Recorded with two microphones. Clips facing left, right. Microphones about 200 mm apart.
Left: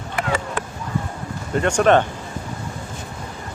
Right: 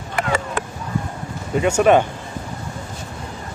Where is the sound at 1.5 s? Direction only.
5° right (ahead or behind).